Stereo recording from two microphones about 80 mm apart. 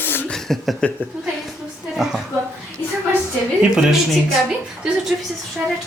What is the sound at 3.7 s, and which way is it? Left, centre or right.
A woman's voice, centre.